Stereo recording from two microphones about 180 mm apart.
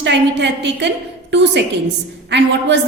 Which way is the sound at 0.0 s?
80° right.